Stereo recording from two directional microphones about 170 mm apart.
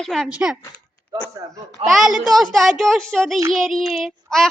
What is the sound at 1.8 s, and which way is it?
Speech, centre (ahead or behind).